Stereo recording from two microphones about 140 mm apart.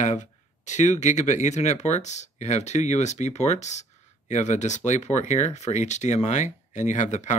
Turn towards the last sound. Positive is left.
turn(degrees=60)  # may be behind; listen again after turning